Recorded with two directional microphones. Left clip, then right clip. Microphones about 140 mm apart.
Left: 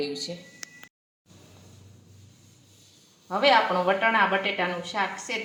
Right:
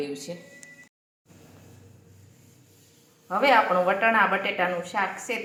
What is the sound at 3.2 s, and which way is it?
A woman's voice, 5° right (ahead or behind).